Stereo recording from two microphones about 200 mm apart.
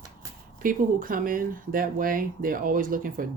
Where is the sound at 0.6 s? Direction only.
45° right (ahead or behind).